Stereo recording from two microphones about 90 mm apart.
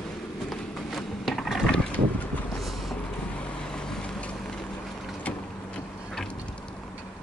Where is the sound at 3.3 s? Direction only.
10° left (ahead or behind).